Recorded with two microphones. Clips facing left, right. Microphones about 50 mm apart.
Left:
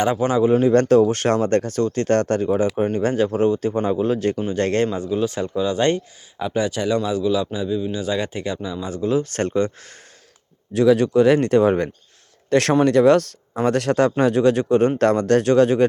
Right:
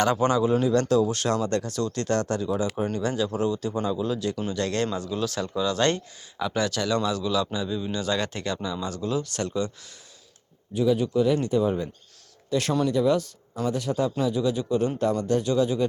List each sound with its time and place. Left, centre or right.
0.0 s a man's voice: centre
0.6 s speech: left
4.9 s a man's voice: left
10.8 s speech: left